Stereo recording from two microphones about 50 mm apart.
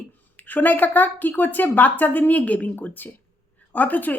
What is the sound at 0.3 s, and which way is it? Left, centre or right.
Speech, left.